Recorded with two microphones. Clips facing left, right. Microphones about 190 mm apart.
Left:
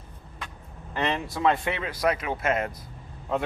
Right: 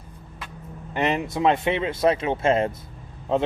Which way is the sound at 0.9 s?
20° right (ahead or behind).